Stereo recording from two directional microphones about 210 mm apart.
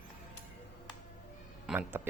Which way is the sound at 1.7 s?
10° right (ahead or behind).